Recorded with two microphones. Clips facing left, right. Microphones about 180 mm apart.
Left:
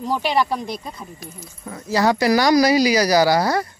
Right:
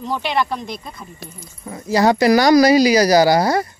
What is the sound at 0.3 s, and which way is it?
Speech, 5° left (ahead or behind).